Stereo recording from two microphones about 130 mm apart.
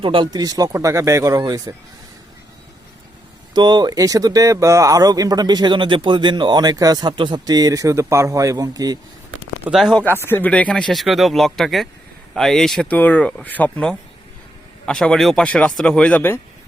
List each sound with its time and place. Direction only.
0.0 s speech: 40° right (ahead or behind)
3.5 s speech: 35° right (ahead or behind)
9.6 s speech: centre (ahead or behind)
10.2 s speech: 15° left (ahead or behind)